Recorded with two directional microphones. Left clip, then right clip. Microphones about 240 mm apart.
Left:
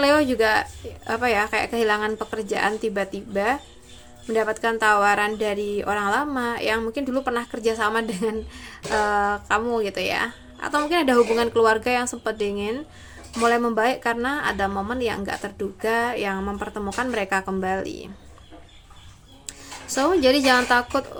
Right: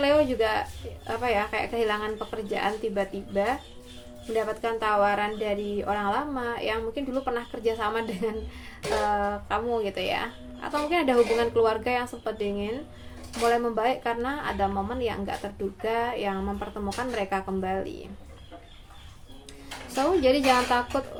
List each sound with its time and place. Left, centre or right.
0.0 s a woman's voice: left
20.0 s speech: left